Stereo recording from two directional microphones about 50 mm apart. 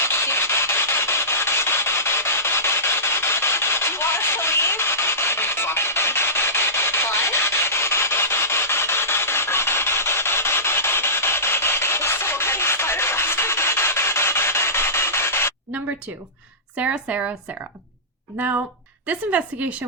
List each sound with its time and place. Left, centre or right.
0.0 s rub: left
16.7 s speech: right
18.3 s a woman's voice: right